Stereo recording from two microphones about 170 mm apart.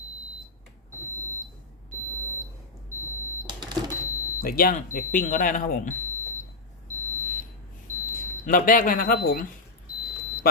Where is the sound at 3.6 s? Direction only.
25° right (ahead or behind).